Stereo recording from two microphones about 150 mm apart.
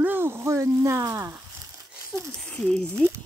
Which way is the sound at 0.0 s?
15° right (ahead or behind).